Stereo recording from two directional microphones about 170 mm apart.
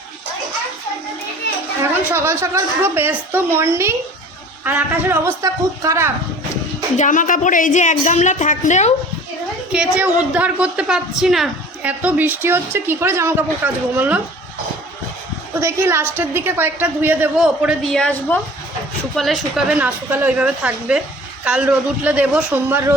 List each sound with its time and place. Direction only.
1.5 s children playing: 90° left
1.8 s a woman's voice: 15° right (ahead or behind)
6.9 s a woman's voice: 50° left (ahead or behind)
9.7 s a woman's voice: 5° right (ahead or behind)
15.6 s a woman's voice: 15° right (ahead or behind)